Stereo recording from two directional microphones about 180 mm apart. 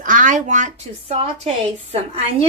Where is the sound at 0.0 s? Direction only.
45° right (ahead or behind).